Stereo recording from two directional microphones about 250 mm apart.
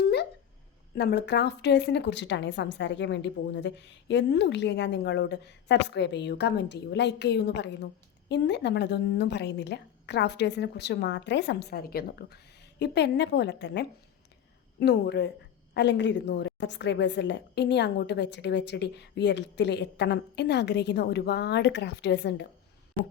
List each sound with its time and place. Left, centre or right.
0.0 s dog: left
0.9 s speech: left